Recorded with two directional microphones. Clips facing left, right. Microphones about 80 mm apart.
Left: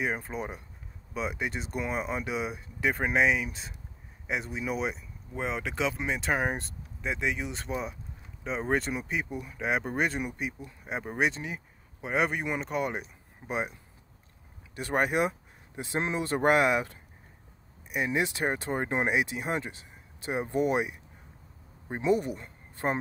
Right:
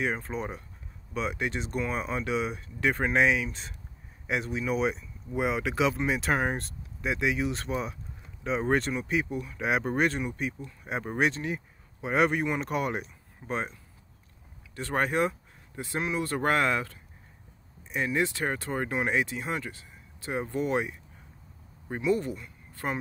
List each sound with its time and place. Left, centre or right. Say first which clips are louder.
0.0 s speech: right 1 dB; centre
14.8 s speech: even; centre
22.4 s a sound: left 3 dB; left